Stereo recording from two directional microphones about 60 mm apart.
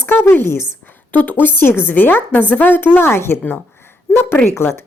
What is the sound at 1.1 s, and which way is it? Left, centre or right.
A woman's voice, left.